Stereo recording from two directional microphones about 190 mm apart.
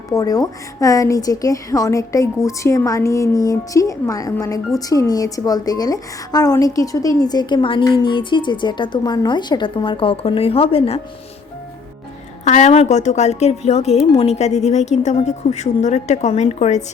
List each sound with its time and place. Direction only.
0.1 s a woman's voice: 20° left (ahead or behind)
12.5 s a woman's voice: 40° left (ahead or behind)